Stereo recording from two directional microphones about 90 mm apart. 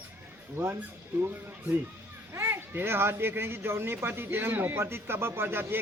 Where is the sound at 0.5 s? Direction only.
25° right (ahead or behind).